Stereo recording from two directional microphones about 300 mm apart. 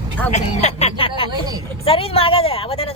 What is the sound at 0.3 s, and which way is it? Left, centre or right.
Speech, left.